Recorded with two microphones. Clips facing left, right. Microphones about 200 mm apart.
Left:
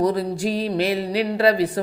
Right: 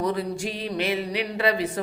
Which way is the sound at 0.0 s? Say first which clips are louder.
Left 5 dB; 35° left (ahead or behind).